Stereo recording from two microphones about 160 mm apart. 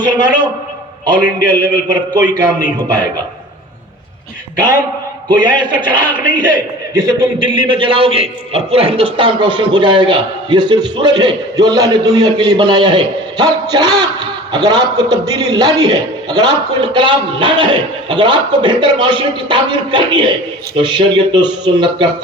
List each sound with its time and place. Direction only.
0.0 s a man's voice: 30° right (ahead or behind)
5.4 s a man's voice: 30° right (ahead or behind)